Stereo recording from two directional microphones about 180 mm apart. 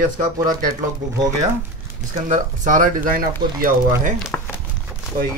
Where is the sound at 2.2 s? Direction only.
45° right (ahead or behind).